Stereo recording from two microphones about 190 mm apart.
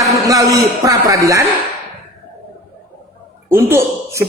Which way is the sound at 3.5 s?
10° right (ahead or behind).